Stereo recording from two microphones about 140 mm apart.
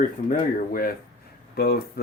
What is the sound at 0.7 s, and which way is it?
Speech, 90° left.